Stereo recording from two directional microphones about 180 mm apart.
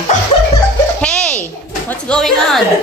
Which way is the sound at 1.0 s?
5° left (ahead or behind).